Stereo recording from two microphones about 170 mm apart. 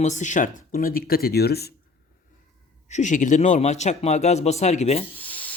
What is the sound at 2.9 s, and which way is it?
A man's voice, 45° left (ahead or behind).